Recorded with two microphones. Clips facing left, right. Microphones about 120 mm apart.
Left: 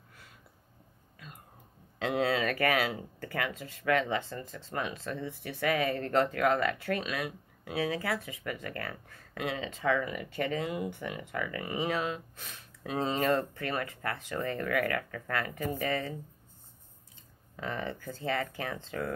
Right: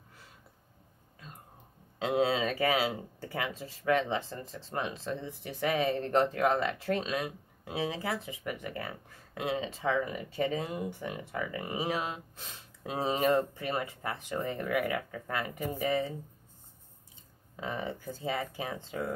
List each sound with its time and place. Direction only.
2.0 s speech: 15° right (ahead or behind)
17.6 s speech: 15° right (ahead or behind)